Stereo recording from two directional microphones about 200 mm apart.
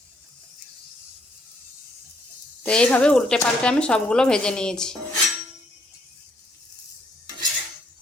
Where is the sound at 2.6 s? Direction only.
5° left (ahead or behind).